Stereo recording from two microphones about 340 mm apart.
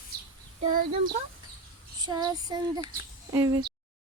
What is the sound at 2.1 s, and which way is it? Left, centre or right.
Speech, centre.